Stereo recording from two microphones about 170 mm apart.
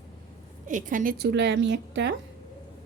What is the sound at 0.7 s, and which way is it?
Speech, 50° right (ahead or behind).